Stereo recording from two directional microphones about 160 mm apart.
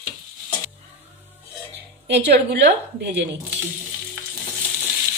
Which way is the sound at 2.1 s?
90° right.